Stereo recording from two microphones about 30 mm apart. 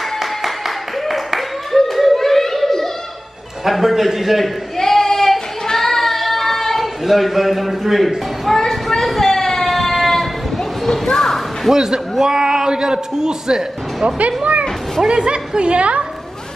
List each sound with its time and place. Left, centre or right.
0.2 s clapping: centre
3.6 s a man's voice: centre
4.7 s child singing: centre
8.5 s a sound: centre
9.7 s train: centre
11.1 s a sound: centre
11.7 s a man's voice: centre
14.0 s speech: right
15.0 s a woman's voice: right